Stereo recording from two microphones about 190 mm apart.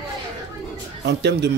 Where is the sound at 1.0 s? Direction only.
65° right (ahead or behind).